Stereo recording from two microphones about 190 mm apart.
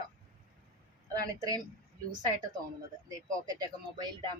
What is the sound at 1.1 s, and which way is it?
Speech, 20° right (ahead or behind).